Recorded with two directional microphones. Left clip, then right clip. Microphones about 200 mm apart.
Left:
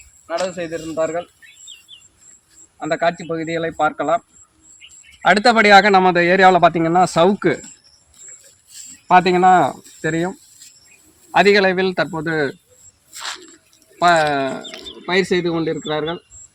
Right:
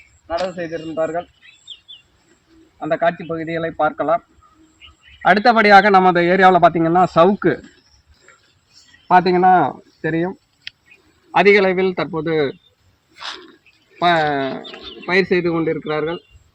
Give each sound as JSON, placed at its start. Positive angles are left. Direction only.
{"t": 0.3, "sound": "a man's voice", "side_deg": 5}
{"t": 2.7, "sound": "a man's voice", "side_deg": 0}
{"t": 5.2, "sound": "a man's voice", "side_deg": 5}
{"t": 9.0, "sound": "a man's voice", "side_deg": 5}
{"t": 13.1, "sound": "a sound", "side_deg": 15}
{"t": 14.0, "sound": "speech", "side_deg": 20}